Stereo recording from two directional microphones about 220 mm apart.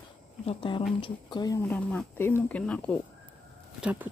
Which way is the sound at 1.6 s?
5° left (ahead or behind).